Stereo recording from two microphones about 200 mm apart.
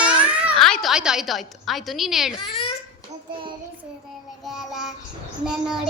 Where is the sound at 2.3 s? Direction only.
25° left (ahead or behind).